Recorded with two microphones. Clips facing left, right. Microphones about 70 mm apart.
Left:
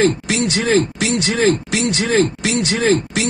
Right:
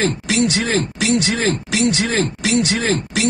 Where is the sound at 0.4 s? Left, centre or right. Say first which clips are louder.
Left 2 dB; left.